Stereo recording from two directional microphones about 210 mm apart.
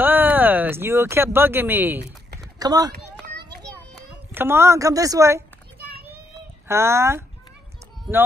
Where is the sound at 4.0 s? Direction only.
10° right (ahead or behind).